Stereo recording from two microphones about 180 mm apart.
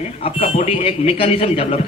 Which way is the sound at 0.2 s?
35° left (ahead or behind).